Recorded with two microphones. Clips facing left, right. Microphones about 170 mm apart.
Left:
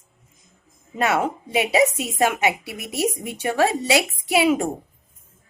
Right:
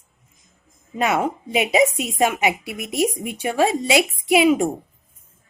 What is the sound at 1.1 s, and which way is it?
Speech, 15° right (ahead or behind).